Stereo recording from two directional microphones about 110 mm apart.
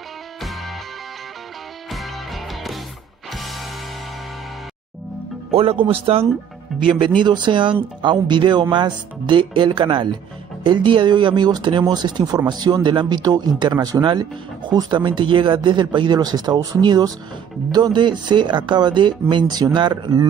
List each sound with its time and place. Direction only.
0.4 s music: centre (ahead or behind)
1.9 s music: centre (ahead or behind)
5.5 s speech: 60° right (ahead or behind)
6.8 s speech: 50° right (ahead or behind)